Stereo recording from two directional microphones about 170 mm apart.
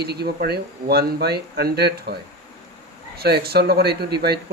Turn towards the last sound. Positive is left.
turn(degrees=-70)  # may be behind; listen again after turning